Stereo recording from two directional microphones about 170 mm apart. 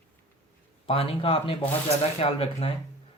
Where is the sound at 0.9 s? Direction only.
35° left (ahead or behind).